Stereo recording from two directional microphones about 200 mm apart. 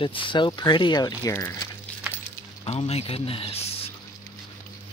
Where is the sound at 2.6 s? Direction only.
30° left (ahead or behind).